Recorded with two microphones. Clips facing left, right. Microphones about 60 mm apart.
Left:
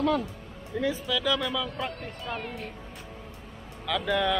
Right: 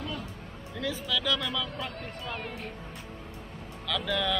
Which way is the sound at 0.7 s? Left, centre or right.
Left.